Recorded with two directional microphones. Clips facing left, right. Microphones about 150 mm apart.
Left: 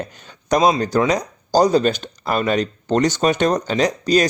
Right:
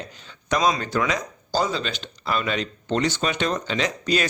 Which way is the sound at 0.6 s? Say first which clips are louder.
Left 6 dB; 35° left (ahead or behind).